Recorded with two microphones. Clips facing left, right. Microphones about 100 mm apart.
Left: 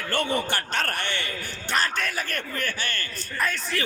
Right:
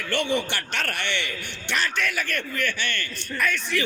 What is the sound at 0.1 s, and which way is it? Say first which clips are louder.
Speech: right 1 dB; 40° left (ahead or behind).